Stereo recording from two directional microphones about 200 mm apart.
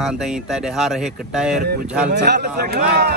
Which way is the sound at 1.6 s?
50° right (ahead or behind).